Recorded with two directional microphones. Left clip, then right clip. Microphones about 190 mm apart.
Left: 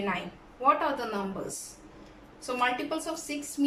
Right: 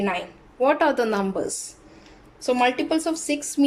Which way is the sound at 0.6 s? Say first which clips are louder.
Right 6 dB; 55° right (ahead or behind).